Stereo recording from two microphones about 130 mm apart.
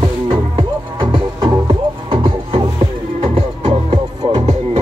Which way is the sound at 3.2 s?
55° right (ahead or behind).